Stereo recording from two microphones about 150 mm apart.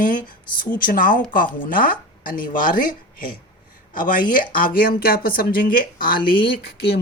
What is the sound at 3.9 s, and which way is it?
Speech, 65° left (ahead or behind).